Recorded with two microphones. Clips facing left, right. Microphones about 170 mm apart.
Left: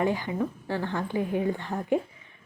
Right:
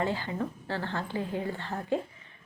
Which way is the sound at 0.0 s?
15° left (ahead or behind).